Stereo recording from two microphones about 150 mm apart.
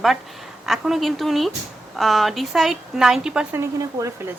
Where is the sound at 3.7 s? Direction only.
20° right (ahead or behind).